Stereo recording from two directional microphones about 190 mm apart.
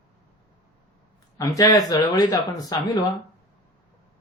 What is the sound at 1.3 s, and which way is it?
Speech, 20° left (ahead or behind).